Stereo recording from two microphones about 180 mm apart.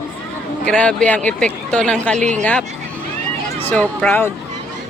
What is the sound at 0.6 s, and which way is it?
Speech, 5° left (ahead or behind).